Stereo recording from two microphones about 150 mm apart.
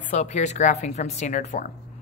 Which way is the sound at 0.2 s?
50° left (ahead or behind).